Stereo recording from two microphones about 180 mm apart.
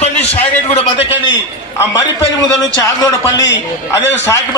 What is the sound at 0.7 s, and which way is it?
Speech, 35° left (ahead or behind).